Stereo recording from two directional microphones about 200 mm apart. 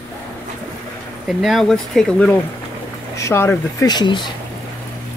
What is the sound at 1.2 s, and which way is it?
Speech, centre (ahead or behind).